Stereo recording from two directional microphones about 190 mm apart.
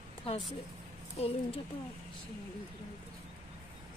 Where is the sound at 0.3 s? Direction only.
30° left (ahead or behind).